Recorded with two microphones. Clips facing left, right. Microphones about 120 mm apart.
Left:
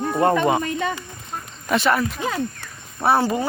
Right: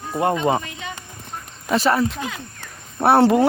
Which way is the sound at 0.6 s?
45° left (ahead or behind).